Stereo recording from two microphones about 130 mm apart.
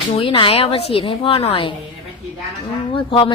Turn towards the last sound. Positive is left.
turn(degrees=40)  # may be behind; listen again after turning